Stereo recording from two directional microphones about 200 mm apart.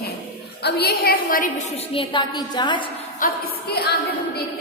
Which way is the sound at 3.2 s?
50° left (ahead or behind).